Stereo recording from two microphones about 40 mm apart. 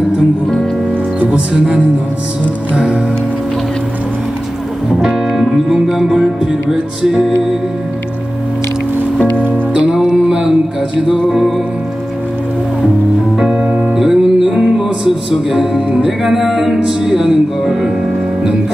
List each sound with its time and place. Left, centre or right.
1.3 s speech: right
5.3 s speech: centre
7.0 s music: centre
9.8 s music: centre
13.4 s music: centre